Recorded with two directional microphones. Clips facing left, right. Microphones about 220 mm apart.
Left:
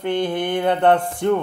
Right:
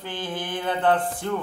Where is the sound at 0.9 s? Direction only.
25° left (ahead or behind).